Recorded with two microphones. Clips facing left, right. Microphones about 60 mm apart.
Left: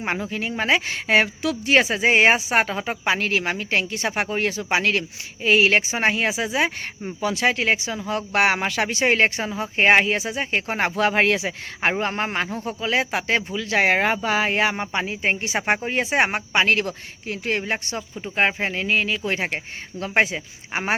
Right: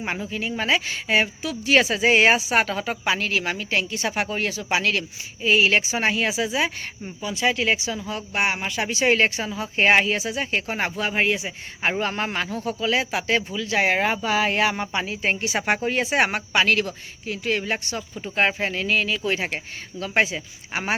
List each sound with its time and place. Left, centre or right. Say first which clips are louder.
0.0 s a woman's voice: left 2 dB; left
1.0 s speech: left 5 dB; left
1.6 s a woman's voice: even; left
7.2 s speech: left 6 dB; left
7.4 s a woman's voice: even; left
8.3 s a woman's voice: left 4 dB; left
10.8 s speech: left 6 dB; left
11.8 s speech: left 2 dB; left
12.0 s a woman's voice: left 1 dB; left